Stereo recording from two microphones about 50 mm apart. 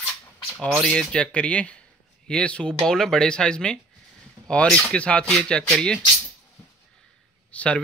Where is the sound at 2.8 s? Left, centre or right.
Centre; by 5.2 s left.